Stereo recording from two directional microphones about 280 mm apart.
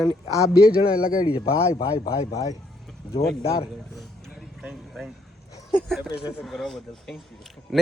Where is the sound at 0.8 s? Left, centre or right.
Left.